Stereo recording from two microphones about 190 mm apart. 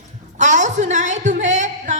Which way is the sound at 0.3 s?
40° right (ahead or behind).